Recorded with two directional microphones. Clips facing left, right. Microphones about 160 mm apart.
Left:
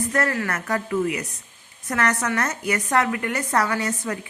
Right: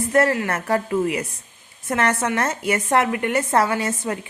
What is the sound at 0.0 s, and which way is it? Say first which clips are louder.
A woman's voice: right 5 dB; 30° right (ahead or behind).